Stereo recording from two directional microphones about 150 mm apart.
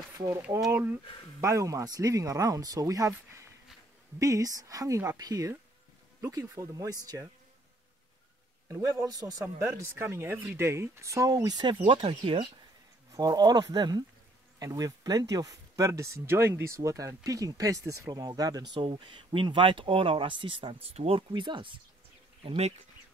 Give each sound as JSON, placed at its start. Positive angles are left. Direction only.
{"t": 0.7, "sound": "speech", "side_deg": -15}
{"t": 8.6, "sound": "speech", "side_deg": -20}
{"t": 13.1, "sound": "speech", "side_deg": -25}